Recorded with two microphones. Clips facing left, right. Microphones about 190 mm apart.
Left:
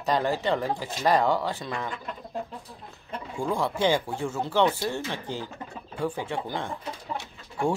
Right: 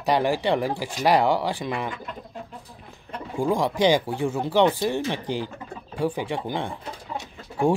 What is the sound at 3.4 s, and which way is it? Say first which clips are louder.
Speech: right 4 dB; 15° right (ahead or behind).